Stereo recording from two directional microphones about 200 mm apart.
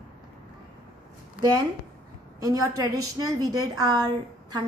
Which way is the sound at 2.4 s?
15° right (ahead or behind).